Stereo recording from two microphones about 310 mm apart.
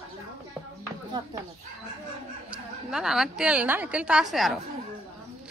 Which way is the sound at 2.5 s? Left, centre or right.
Centre.